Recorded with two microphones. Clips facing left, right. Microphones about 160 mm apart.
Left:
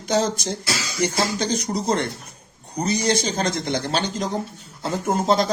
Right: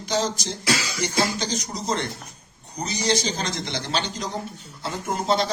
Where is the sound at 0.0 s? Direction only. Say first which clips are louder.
Left 4 dB; 55° left (ahead or behind).